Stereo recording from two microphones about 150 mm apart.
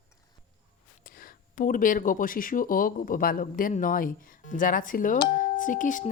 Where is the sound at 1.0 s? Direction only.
70° left (ahead or behind).